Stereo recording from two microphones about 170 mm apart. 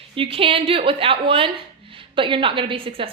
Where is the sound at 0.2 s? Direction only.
35° right (ahead or behind).